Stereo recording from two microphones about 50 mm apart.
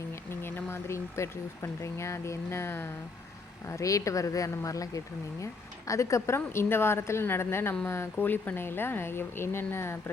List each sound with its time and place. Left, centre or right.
0.3 s speech: left
3.7 s speech: left
5.9 s a woman's voice: left
7.9 s speech: left
8.2 s speech: left